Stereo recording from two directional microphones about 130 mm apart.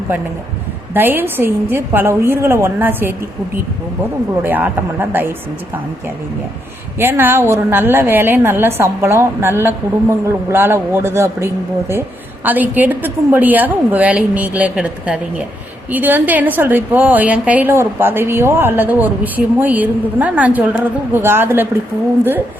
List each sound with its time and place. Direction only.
0.9 s a woman's voice: 15° right (ahead or behind)
4.4 s a woman's voice: 15° right (ahead or behind)
7.0 s a woman's voice: 15° right (ahead or behind)